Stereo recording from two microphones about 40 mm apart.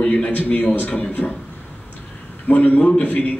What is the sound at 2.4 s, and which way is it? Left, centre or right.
Speech, left.